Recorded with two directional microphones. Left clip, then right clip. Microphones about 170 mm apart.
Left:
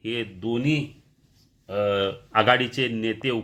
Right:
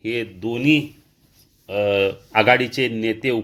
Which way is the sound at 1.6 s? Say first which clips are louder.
Right 5 dB; 35° right (ahead or behind).